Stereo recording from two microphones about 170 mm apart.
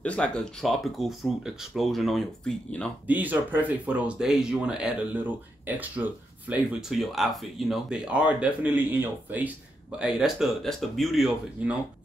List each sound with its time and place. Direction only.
0.0 s speech: 5° left (ahead or behind)
3.1 s speech: 10° right (ahead or behind)